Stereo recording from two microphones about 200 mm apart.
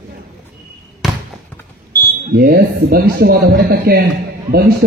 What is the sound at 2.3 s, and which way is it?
A man's voice, 50° right (ahead or behind).